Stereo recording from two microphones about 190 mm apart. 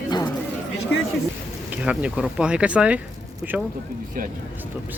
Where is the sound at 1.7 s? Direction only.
5° right (ahead or behind).